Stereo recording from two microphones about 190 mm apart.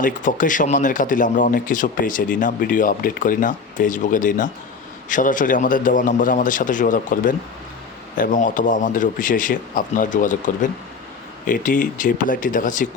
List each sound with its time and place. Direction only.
0.0 s speech: 45° left (ahead or behind)